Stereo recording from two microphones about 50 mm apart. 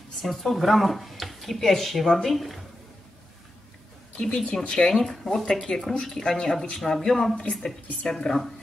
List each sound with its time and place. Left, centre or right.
0.2 s speech: centre
4.2 s speech: centre
6.2 s speech: centre